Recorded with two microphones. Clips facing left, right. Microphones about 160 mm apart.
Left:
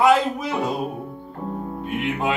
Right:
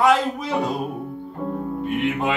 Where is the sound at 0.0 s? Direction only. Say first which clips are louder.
Left 1 dB; centre (ahead or behind).